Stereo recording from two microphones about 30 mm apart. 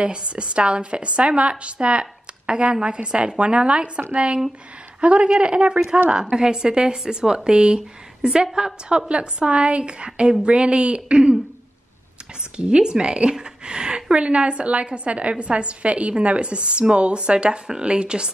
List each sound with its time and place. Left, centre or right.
0.0 s speech: right
8.3 s speech: right
9.1 s speech: right
12.5 s speech: right
14.1 s speech: right
17.5 s speech: right